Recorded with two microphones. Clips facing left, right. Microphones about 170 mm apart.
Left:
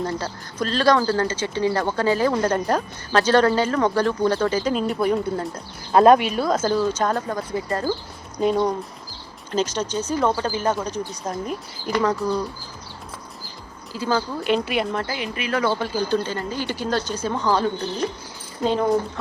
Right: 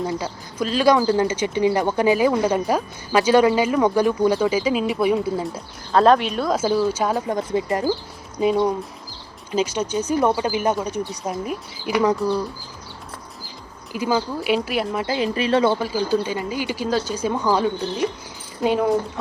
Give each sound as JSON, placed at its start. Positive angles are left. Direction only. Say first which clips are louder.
{"t": 0.0, "sound": "speech", "louder": "right 1 dB", "side_deg": -5}
{"t": 5.9, "sound": "speech", "louder": "left 2 dB", "side_deg": 10}
{"t": 6.6, "sound": "speech", "louder": "right 1 dB", "side_deg": -10}
{"t": 7.3, "sound": "speech", "louder": "right 4 dB", "side_deg": -20}
{"t": 8.4, "sound": "speech", "louder": "right 1 dB", "side_deg": -5}
{"t": 13.9, "sound": "speech", "louder": "right 2 dB", "side_deg": -15}
{"t": 14.4, "sound": "speech", "louder": "even", "side_deg": -5}
{"t": 15.0, "sound": "speech", "louder": "right 6 dB", "side_deg": -30}
{"t": 15.8, "sound": "speech", "louder": "right 1 dB", "side_deg": -5}